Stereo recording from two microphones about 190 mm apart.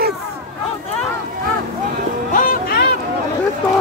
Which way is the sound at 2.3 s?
55° left (ahead or behind).